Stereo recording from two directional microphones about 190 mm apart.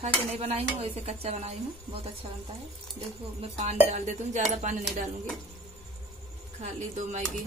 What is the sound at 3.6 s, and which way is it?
Speech, 35° right (ahead or behind).